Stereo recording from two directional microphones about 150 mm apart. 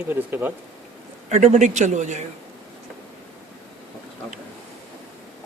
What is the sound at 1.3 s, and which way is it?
Speech, 55° right (ahead or behind).